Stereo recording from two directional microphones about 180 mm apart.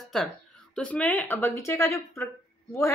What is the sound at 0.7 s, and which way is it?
A woman's voice, 5° left (ahead or behind).